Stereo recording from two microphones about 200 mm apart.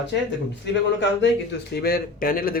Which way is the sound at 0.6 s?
60° left (ahead or behind).